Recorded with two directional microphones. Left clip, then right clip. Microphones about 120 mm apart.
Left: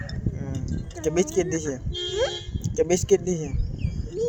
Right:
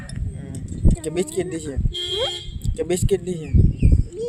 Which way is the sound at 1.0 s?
25° right (ahead or behind).